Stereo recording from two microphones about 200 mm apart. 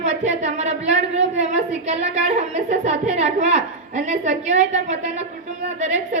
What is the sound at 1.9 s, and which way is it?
A woman's voice, 35° right (ahead or behind).